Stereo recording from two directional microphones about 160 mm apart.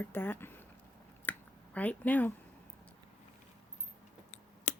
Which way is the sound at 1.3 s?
10° left (ahead or behind).